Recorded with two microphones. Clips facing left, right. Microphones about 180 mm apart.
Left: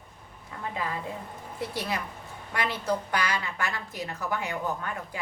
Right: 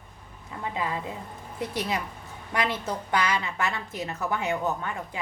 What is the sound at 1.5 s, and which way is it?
A woman's voice, 20° right (ahead or behind).